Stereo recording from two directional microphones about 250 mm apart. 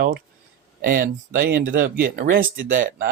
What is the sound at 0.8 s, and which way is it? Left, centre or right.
Speech, right.